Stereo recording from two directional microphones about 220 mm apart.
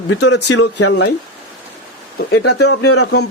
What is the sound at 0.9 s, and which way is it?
Speech, 50° left (ahead or behind).